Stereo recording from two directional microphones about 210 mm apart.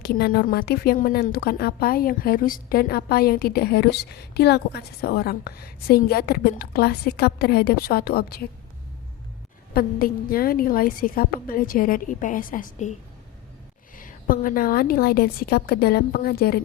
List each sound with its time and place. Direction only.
0.0 s a woman's voice: 45° left (ahead or behind)
9.7 s a woman's voice: 45° left (ahead or behind)
13.9 s a woman's voice: 40° left (ahead or behind)